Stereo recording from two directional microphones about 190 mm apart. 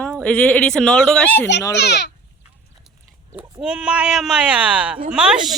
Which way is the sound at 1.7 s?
60° left (ahead or behind).